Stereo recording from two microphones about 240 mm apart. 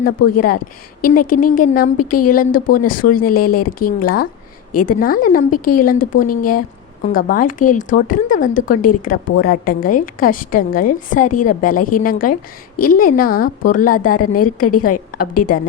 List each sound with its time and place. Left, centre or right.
0.0 s a woman's voice: left
14.4 s a woman's voice: left